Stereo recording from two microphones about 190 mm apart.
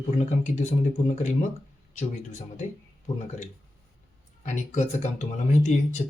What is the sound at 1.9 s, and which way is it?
Speech, 40° left (ahead or behind).